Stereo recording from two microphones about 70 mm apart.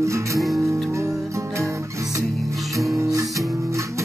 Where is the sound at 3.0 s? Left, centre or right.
Right.